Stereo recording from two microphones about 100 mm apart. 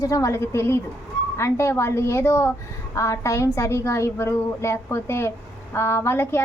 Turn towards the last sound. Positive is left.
turn(degrees=25)  # may be behind; listen again after turning